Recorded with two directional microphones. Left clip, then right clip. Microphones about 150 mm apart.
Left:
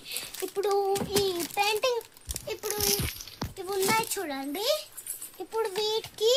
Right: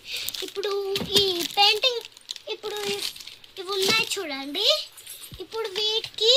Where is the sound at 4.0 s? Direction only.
55° left (ahead or behind).